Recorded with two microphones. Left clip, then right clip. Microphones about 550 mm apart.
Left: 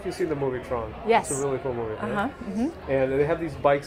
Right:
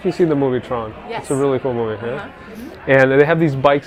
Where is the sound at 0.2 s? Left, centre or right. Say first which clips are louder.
Right 10 dB; right.